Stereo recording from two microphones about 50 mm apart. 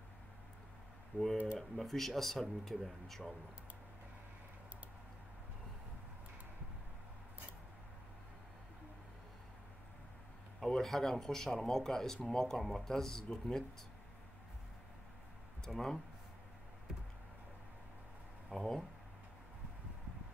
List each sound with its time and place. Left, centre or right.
1.1 s speech: left
1.6 s speech: centre
10.6 s speech: centre
15.6 s speech: centre
18.5 s speech: centre